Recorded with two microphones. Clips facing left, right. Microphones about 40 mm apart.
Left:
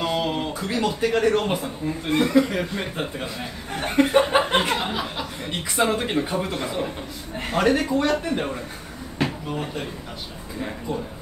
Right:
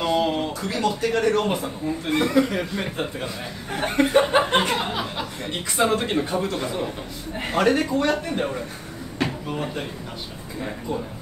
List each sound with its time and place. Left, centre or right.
0.0 s a sound: centre
0.6 s speech: centre
7.3 s speech: centre